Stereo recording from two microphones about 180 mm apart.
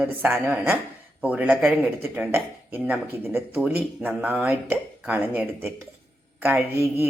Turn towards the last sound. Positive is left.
turn(degrees=-10)  # may be behind; listen again after turning